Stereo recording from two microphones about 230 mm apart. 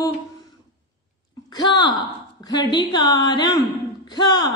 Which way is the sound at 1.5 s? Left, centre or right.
Centre.